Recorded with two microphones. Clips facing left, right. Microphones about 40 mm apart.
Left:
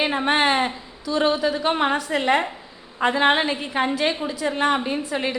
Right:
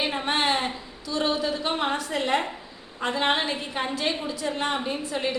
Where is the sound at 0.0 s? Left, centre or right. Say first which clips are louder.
Left 5 dB; left.